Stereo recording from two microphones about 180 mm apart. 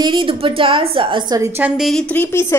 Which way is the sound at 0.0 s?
25° right (ahead or behind).